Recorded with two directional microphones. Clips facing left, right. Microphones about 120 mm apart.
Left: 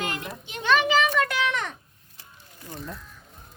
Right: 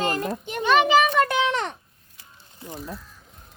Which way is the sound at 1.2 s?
25° right (ahead or behind).